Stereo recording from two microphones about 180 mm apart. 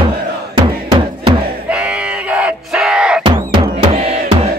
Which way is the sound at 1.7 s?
5° right (ahead or behind).